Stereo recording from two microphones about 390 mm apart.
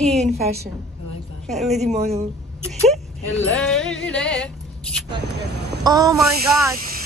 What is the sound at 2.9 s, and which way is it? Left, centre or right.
Speech, centre.